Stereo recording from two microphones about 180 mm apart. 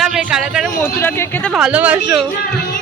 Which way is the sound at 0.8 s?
10° left (ahead or behind).